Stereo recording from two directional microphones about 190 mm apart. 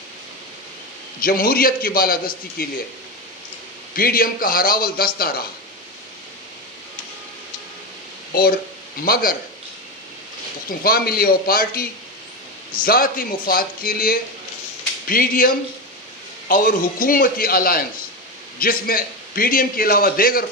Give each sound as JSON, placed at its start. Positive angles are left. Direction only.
{"t": 1.2, "sound": "a man's voice", "side_deg": 50}
{"t": 3.9, "sound": "a man's voice", "side_deg": 50}
{"t": 8.3, "sound": "a man's voice", "side_deg": 50}
{"t": 10.7, "sound": "a man's voice", "side_deg": 50}